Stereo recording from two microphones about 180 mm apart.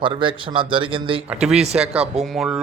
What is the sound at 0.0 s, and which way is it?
A man's voice, 30° right (ahead or behind).